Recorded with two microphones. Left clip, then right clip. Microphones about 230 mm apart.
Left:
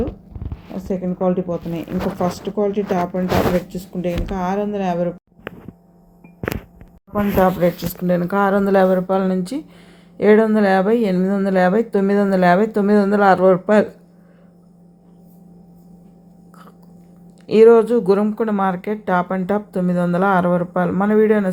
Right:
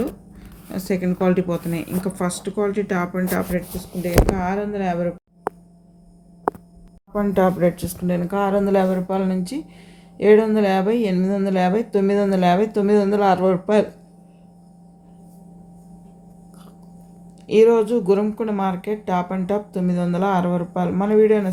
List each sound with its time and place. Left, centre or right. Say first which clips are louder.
0.8 s speech: even; right
4.0 s speech: right 3 dB; centre
7.1 s speech: left 2 dB; centre
8.0 s speech: left 4 dB; centre
17.4 s speech: left 4 dB; centre